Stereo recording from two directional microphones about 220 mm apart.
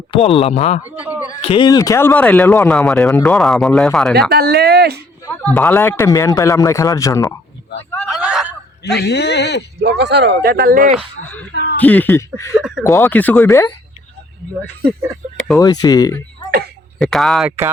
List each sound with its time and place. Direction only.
0.1 s speech: 25° left (ahead or behind); by 4.1 s centre (ahead or behind)
4.3 s speech: 45° right (ahead or behind)
5.2 s speech: 5° left (ahead or behind)
8.1 s a sound: centre (ahead or behind)
8.8 s speech: 50° left (ahead or behind)
9.8 s speech: 50° right (ahead or behind)
11.3 s speech: 5° left (ahead or behind)
11.5 s a sound: 45° left (ahead or behind)
11.8 s speech: 10° left (ahead or behind)
12.5 s speech: centre (ahead or behind)
12.8 s speech: 15° left (ahead or behind)
15.5 s speech: 15° left (ahead or behind)
17.0 s speech: centre (ahead or behind)